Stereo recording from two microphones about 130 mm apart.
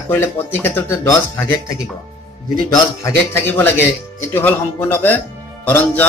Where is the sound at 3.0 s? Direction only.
20° left (ahead or behind).